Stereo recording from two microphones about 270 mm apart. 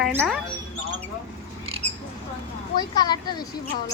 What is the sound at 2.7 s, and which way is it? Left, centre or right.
Speech, centre.